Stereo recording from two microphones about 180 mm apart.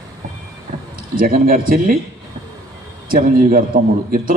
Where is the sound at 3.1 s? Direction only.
50° right (ahead or behind).